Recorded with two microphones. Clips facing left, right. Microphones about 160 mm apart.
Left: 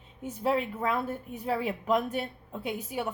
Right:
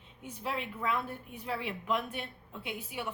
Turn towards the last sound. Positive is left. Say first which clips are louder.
# left 6 dB
turn(degrees=40)  # may be behind; listen again after turning